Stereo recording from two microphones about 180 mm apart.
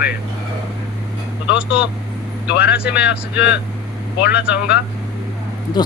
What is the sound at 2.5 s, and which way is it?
Speech, 65° left (ahead or behind).